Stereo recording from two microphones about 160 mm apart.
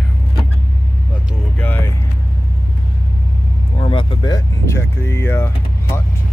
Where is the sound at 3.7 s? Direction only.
30° left (ahead or behind); by 6.0 s 15° left (ahead or behind).